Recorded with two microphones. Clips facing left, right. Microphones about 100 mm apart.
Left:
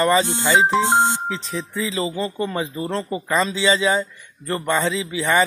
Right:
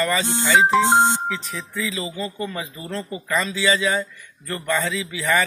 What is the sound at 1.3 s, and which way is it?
Speech, 30° left (ahead or behind).